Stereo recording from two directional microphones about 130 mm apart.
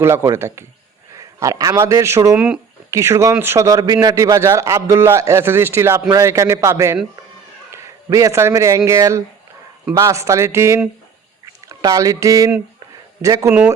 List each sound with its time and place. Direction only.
0.0 s a man's voice: 20° right (ahead or behind)
11.7 s a sound: 25° right (ahead or behind)
13.2 s a man's voice: 25° right (ahead or behind)
13.5 s speech: 15° right (ahead or behind)